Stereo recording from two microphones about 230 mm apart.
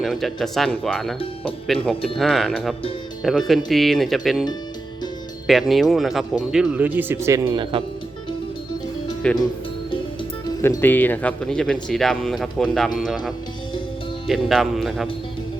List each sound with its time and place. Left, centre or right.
0.0 s speech: centre
5.5 s speech: centre; by 7.9 s right
9.2 s speech: centre
10.6 s speech: centre
14.3 s speech: centre